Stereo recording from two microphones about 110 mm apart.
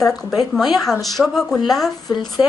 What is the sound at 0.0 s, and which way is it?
A woman's voice, centre (ahead or behind).